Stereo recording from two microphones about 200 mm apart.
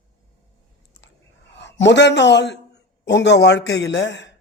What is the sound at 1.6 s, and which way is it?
A man's voice, 60° left (ahead or behind).